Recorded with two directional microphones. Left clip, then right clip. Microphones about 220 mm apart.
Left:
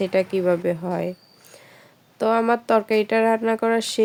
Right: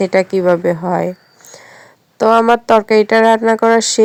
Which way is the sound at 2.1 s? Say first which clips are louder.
Right 10 dB; 25° right (ahead or behind).